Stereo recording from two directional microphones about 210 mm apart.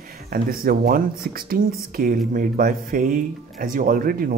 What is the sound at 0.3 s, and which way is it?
Speech, 45° right (ahead or behind).